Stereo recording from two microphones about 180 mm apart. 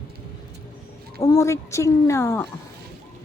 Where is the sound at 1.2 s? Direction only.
15° left (ahead or behind).